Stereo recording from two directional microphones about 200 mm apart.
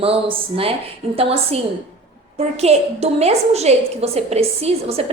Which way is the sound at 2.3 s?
30° right (ahead or behind).